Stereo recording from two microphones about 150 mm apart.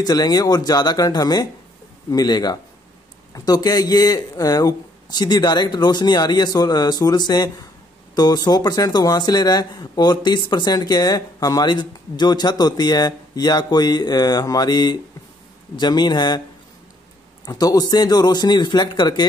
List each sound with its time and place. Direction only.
0.0 s speech: 25° left (ahead or behind)
17.5 s speech: 25° left (ahead or behind)